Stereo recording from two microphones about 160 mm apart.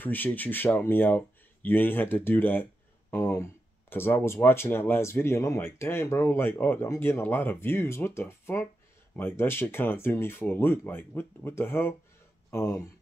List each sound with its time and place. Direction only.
0.0 s speech: 10° left (ahead or behind)